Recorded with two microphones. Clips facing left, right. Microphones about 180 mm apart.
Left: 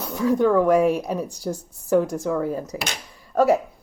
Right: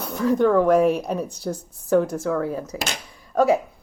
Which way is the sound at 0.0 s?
10° left (ahead or behind).